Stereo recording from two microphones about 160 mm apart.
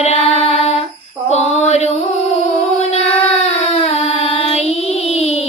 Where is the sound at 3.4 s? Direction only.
40° left (ahead or behind).